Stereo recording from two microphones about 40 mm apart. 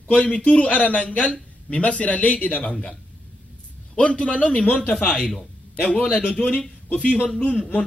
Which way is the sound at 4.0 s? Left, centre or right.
Left.